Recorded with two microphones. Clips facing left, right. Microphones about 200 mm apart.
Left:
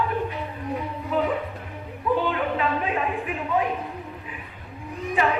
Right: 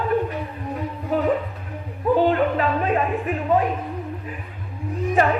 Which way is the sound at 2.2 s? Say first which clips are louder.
Right 5 dB; 45° right (ahead or behind).